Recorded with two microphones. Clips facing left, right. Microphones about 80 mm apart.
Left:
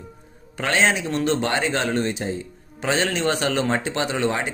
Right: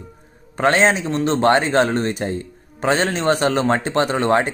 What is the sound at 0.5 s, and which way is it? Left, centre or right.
A man's voice, right.